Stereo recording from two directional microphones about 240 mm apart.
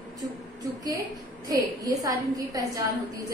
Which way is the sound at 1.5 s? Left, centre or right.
Centre.